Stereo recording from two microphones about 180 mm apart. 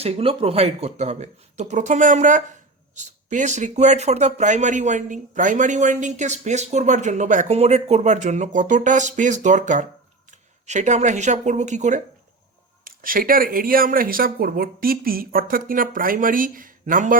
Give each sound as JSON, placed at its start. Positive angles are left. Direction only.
{"t": 0.0, "sound": "speech", "side_deg": -35}